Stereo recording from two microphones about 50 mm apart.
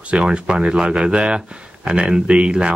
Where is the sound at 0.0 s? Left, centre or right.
Right.